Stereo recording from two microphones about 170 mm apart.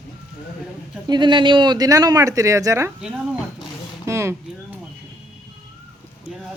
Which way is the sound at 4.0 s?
15° right (ahead or behind).